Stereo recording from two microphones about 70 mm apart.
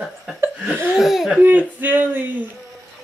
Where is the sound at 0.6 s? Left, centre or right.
Right.